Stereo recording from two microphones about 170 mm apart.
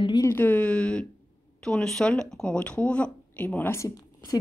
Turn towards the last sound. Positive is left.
turn(degrees=20)  # may be behind; listen again after turning